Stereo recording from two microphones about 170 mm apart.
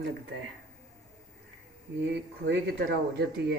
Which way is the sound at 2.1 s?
80° right.